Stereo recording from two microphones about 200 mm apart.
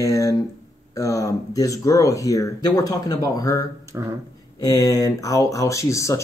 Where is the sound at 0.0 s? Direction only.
15° left (ahead or behind).